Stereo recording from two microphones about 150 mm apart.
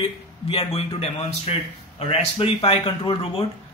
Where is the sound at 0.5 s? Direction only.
40° left (ahead or behind).